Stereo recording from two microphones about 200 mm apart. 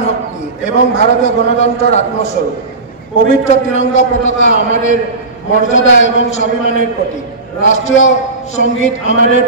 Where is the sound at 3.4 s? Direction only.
35° left (ahead or behind).